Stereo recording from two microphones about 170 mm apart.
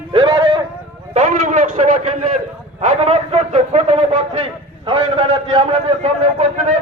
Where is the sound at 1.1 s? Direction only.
45° right (ahead or behind).